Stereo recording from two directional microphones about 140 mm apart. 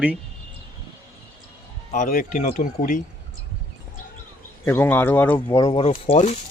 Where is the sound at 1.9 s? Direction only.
70° left (ahead or behind).